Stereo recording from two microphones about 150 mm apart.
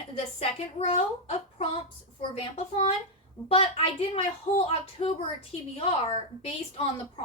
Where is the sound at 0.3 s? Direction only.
45° left (ahead or behind).